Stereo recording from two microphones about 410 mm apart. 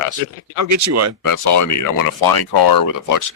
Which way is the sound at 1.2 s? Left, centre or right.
Left.